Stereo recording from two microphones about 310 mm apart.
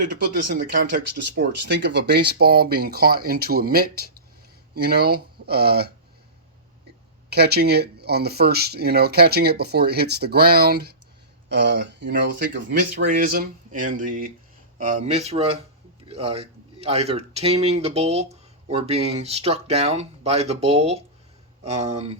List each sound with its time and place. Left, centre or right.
0.4 s speech: right
7.3 s speech: right